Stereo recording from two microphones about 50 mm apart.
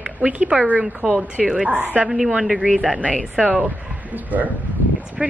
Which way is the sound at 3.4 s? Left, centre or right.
Right.